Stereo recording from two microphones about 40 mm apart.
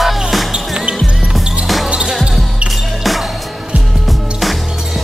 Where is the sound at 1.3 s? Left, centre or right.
Centre.